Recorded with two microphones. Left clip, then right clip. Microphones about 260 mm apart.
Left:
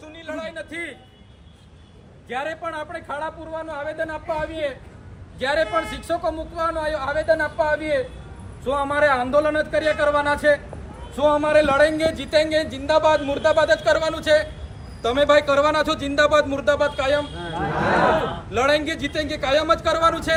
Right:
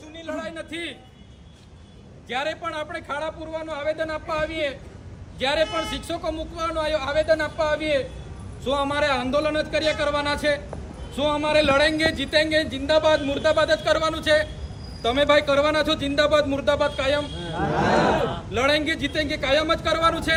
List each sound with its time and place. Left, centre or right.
0.4 s a sound: centre
2.3 s speech: centre
18.5 s speech: centre